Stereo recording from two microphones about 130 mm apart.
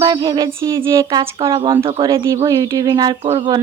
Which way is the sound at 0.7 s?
25° right (ahead or behind).